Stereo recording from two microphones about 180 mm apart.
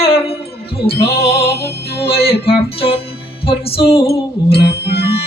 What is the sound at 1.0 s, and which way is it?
Music, 60° left (ahead or behind).